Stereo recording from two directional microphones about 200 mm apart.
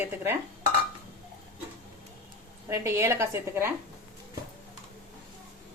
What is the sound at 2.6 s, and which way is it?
A woman's voice, 15° right (ahead or behind).